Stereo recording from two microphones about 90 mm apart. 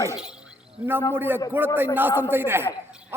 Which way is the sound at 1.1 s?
25° right (ahead or behind).